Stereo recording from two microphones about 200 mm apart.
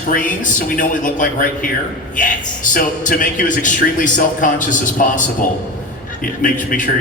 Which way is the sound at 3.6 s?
40° left (ahead or behind).